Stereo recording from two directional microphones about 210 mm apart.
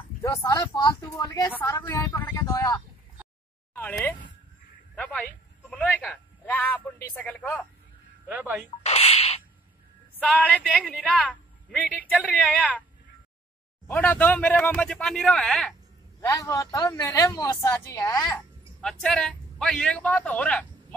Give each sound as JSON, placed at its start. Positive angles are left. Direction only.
{"t": 0.2, "sound": "speech", "side_deg": 15}
{"t": 8.3, "sound": "speech", "side_deg": -10}
{"t": 8.6, "sound": "a sound", "side_deg": 30}
{"t": 10.1, "sound": "a woman's voice", "side_deg": 5}
{"t": 13.8, "sound": "speech", "side_deg": 10}
{"t": 16.2, "sound": "speech", "side_deg": 15}
{"t": 18.8, "sound": "speech", "side_deg": 0}